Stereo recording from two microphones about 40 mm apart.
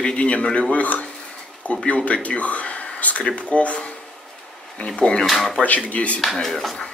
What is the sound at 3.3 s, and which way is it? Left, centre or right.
Speech, left.